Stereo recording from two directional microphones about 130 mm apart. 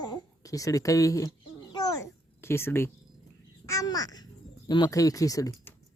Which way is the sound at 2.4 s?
20° left (ahead or behind).